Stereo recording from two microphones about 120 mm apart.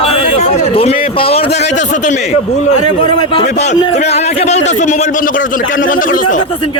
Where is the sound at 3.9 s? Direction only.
65° left (ahead or behind); by 6.4 s 90° left.